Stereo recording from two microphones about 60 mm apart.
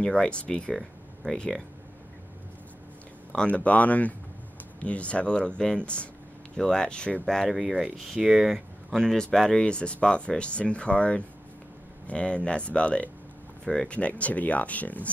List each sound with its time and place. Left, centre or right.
0.0 s speech: centre
3.3 s speech: left
7.2 s speech: centre
8.9 s speech: centre; by 15.0 s left